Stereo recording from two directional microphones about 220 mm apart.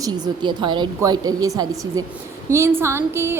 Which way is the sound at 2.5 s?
10° right (ahead or behind).